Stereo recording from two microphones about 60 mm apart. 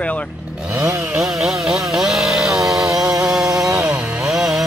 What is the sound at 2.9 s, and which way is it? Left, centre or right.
Chainsaw, centre.